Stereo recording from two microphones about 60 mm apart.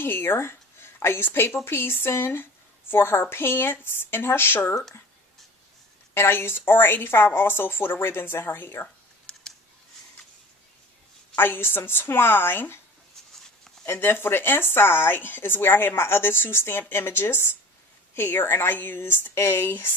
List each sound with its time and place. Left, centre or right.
0.0 s speech: left
6.1 s speech: left
9.3 s a sound: centre
11.3 s speech: left
13.8 s speech: left